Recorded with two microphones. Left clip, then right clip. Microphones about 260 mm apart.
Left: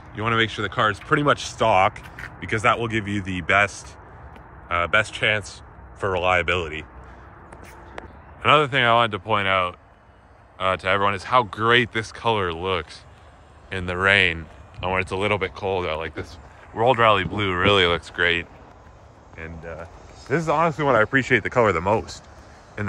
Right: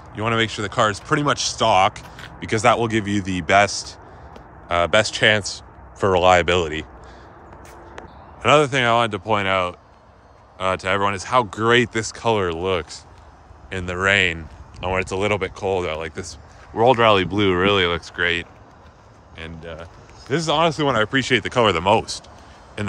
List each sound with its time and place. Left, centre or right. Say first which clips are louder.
0.1 s speech: right 1 dB; centre
8.4 s speech: right 1 dB; centre